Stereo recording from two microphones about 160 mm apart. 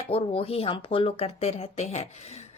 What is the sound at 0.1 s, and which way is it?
Speech, 35° left (ahead or behind).